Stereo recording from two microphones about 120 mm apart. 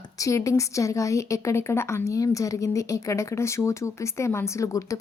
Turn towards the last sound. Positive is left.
turn(degrees=25)  # may be behind; listen again after turning